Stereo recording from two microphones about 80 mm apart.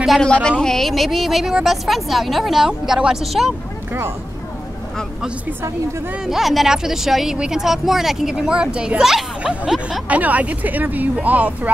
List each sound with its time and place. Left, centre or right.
0.2 s a woman's voice: centre
6.2 s a woman's voice: centre